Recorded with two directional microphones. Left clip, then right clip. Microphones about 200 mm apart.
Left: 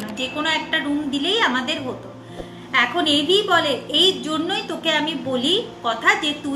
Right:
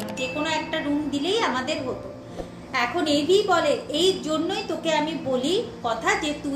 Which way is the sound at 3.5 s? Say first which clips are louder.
Left 3 dB; 5° left (ahead or behind).